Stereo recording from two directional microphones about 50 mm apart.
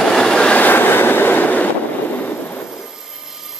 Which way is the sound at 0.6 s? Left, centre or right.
Left.